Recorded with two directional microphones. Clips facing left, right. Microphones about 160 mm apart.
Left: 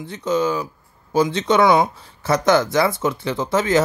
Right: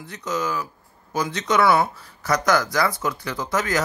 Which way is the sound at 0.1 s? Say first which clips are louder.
Left 6 dB; 30° left (ahead or behind).